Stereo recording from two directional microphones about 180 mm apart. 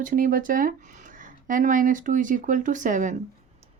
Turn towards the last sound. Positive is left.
turn(degrees=-45)  # may be behind; listen again after turning